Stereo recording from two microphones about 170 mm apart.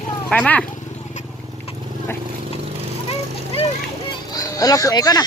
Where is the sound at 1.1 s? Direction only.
45° left (ahead or behind).